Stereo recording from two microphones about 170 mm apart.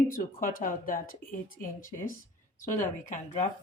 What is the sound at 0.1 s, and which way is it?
Speech, 55° left (ahead or behind).